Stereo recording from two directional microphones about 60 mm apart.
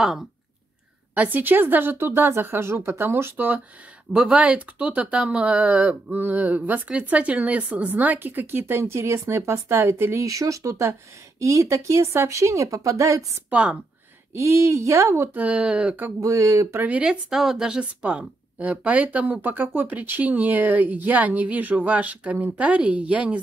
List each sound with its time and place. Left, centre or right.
1.1 s speech: right
3.3 s a woman's voice: right
4.1 s a woman's voice: centre; by 10.2 s right
10.2 s speech: right
13.5 s a woman's voice: right
14.3 s speech: right
15.3 s a woman's voice: right
16.2 s speech: right
16.8 s a woman's voice: right
17.3 s a woman's voice: centre; by 23.4 s right